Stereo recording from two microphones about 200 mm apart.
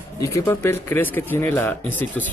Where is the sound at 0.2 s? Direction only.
15° left (ahead or behind).